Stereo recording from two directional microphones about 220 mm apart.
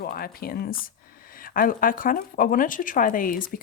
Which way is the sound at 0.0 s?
45° left (ahead or behind).